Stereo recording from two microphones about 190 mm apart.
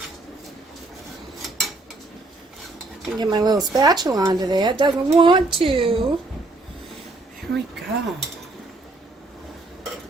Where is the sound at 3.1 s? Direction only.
20° right (ahead or behind).